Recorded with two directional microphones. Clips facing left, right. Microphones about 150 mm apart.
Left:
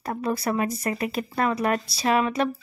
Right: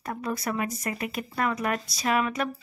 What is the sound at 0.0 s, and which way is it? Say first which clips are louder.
Speech: left 4 dB; 30° left (ahead or behind).